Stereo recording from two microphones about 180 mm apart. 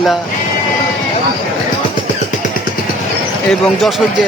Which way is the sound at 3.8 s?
Centre (ahead or behind).